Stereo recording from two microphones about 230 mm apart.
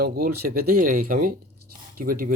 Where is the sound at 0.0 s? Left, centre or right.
Right.